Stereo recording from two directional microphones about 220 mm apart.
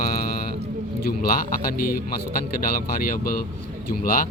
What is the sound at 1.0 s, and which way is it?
Speech, 40° left (ahead or behind).